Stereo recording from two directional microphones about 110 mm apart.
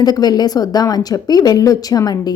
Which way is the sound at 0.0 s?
40° left (ahead or behind).